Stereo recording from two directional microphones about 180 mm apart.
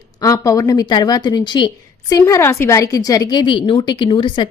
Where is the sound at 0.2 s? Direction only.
20° left (ahead or behind).